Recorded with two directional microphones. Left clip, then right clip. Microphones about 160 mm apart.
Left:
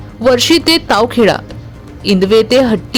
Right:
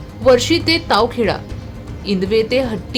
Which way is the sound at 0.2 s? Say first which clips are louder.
Left 3 dB; 50° left (ahead or behind).